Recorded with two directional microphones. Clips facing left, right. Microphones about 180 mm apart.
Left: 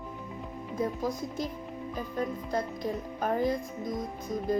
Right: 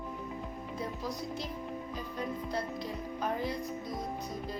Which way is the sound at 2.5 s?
45° left (ahead or behind).